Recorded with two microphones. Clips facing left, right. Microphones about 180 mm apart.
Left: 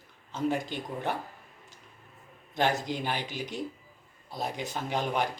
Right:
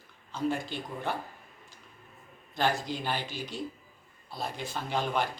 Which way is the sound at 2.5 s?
20° left (ahead or behind).